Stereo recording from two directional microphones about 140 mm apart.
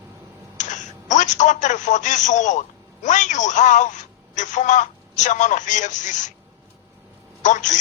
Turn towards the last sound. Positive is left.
turn(degrees=60)  # may be behind; listen again after turning